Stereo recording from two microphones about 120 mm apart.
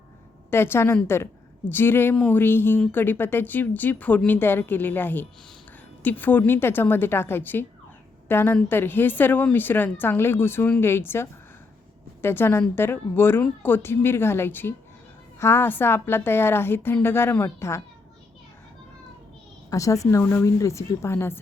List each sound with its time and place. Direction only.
0.5 s a woman's voice: 20° left (ahead or behind)
19.7 s a woman's voice: 25° left (ahead or behind)